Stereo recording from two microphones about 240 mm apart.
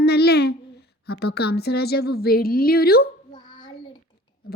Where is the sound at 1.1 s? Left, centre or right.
Left.